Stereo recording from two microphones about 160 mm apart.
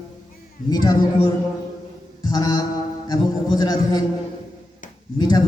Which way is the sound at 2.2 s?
25° left (ahead or behind).